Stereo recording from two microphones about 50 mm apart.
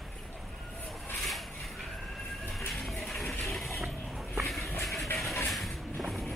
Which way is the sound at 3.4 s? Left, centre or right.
Centre.